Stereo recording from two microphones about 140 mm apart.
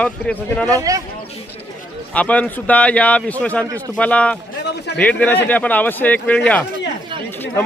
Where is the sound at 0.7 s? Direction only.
25° right (ahead or behind).